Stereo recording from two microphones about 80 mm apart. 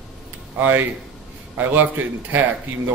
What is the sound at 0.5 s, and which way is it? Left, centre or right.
A man's voice, right.